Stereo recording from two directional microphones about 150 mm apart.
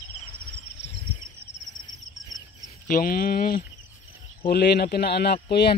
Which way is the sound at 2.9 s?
75° left (ahead or behind).